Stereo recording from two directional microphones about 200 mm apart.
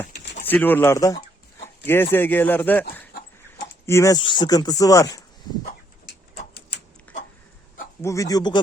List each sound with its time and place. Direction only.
0.4 s speech: 10° left (ahead or behind)
3.8 s speech: 15° left (ahead or behind)
7.1 s a sound: 5° left (ahead or behind)
8.0 s speech: 15° left (ahead or behind)